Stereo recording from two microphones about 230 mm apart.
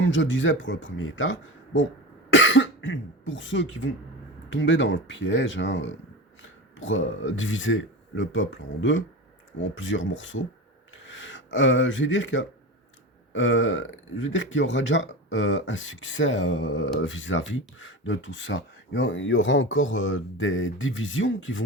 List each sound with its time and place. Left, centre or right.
0.0 s speech: left